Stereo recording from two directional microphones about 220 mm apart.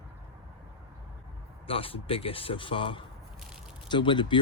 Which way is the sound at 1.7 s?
25° left (ahead or behind).